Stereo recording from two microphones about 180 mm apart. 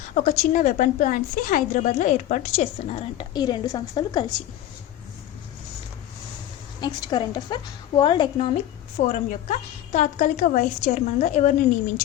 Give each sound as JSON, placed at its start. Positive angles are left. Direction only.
{"t": 0.1, "sound": "a woman's voice", "side_deg": 45}
{"t": 6.8, "sound": "a woman's voice", "side_deg": 25}